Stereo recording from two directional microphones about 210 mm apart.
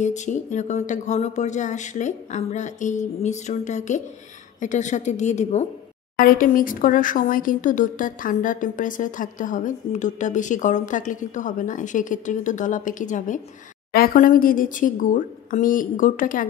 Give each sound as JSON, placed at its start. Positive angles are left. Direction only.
{"t": 0.0, "sound": "speech", "side_deg": 35}